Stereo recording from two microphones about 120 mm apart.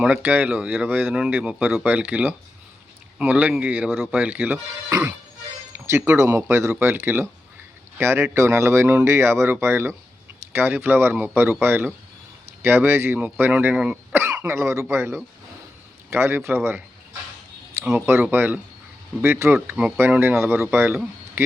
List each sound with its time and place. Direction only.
0.0 s speech: 10° right (ahead or behind)
4.9 s music: 25° right (ahead or behind)
5.7 s speech: 20° right (ahead or behind)
17.9 s speech: 20° right (ahead or behind)